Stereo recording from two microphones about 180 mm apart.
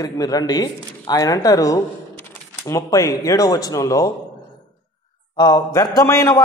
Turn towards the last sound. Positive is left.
turn(degrees=15)  # may be behind; listen again after turning